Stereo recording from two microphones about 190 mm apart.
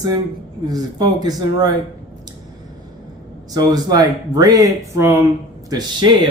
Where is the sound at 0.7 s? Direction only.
20° right (ahead or behind).